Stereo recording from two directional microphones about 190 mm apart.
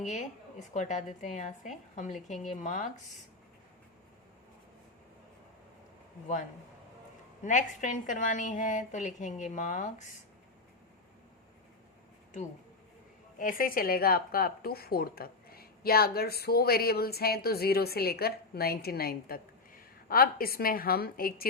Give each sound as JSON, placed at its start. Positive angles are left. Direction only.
{"t": 0.0, "sound": "a woman's voice", "side_deg": 40}
{"t": 7.4, "sound": "a woman's voice", "side_deg": 40}
{"t": 13.4, "sound": "speech", "side_deg": 45}